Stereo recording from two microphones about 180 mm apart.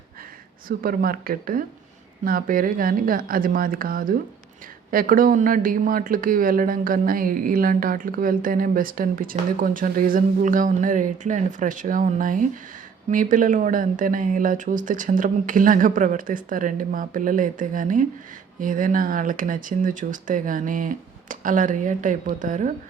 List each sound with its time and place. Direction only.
0.7 s speech: 55° right (ahead or behind)